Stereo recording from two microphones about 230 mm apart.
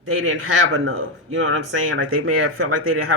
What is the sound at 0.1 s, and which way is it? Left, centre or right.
Speech, right.